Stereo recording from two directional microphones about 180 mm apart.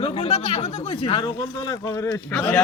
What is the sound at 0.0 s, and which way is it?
Speech, 35° left (ahead or behind).